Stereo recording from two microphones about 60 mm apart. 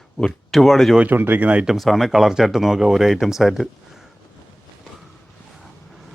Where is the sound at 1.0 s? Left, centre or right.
Right.